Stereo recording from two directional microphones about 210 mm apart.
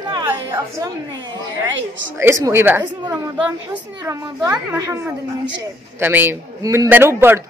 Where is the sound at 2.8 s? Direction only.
20° right (ahead or behind).